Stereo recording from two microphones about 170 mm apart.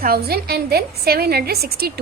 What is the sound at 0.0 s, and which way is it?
A woman's voice, 65° right (ahead or behind).